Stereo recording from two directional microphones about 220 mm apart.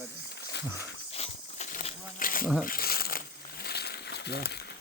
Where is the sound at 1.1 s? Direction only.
30° left (ahead or behind).